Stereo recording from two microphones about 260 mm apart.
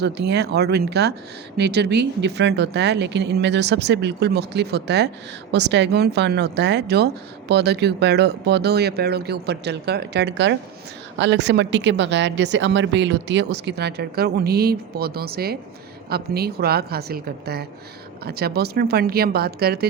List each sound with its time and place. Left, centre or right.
0.0 s speech: right